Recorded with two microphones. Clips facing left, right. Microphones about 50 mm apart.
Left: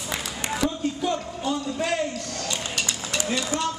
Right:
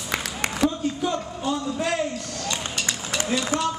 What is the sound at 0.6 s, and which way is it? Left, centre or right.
A man's voice, centre.